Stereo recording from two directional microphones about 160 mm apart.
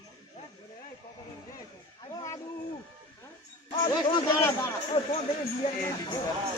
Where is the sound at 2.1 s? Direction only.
20° left (ahead or behind).